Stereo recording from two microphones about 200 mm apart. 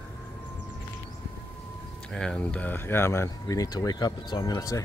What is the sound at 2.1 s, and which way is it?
Speech, 5° left (ahead or behind).